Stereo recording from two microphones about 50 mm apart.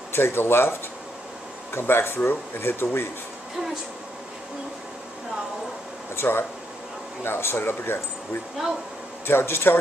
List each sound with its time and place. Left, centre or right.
0.1 s speech: left
6.1 s speech: left
9.3 s speech: left